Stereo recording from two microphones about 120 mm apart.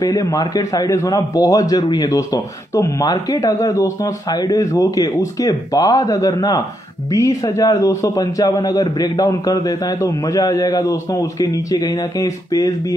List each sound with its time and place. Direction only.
0.0 s a man's voice: 30° left (ahead or behind)